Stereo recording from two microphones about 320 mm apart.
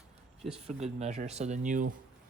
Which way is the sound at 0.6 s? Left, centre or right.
Centre.